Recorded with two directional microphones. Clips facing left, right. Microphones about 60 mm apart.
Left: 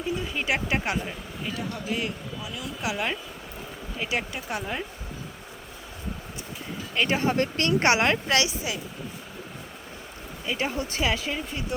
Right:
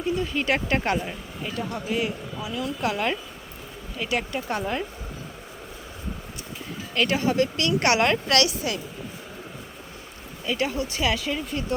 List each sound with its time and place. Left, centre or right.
0.2 s speech: centre
0.9 s speech: centre
3.9 s speech: centre
6.9 s speech: centre
7.2 s speech: left; by 8.8 s centre
10.4 s speech: centre
10.7 s speech: left
11.0 s speech: centre